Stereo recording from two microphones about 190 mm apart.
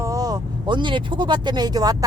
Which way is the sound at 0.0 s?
20° right (ahead or behind).